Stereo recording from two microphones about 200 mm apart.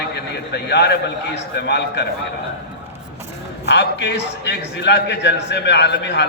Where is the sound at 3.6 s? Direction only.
60° left (ahead or behind).